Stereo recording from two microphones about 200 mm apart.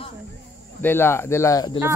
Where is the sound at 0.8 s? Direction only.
10° left (ahead or behind).